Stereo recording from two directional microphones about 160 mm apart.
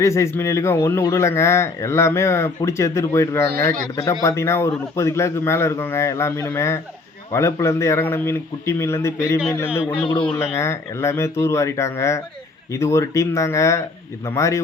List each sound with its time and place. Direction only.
0.0 s speech: 20° left (ahead or behind)
3.4 s a man's voice: 75° right (ahead or behind)
3.9 s speech: 20° left (ahead or behind)
10.1 s a man's voice: 35° left (ahead or behind)
10.6 s speech: 15° left (ahead or behind)